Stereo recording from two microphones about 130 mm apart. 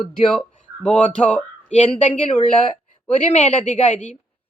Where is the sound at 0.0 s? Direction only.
5° left (ahead or behind).